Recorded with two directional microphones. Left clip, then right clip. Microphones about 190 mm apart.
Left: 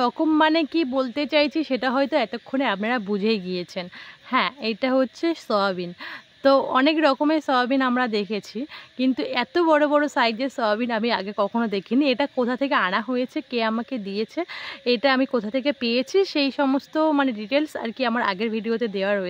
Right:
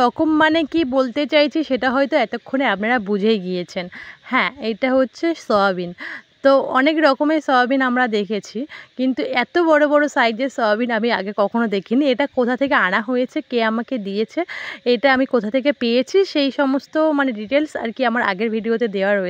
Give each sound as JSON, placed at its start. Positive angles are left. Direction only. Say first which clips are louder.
{"t": 0.0, "sound": "speech", "louder": "right 4 dB", "side_deg": -35}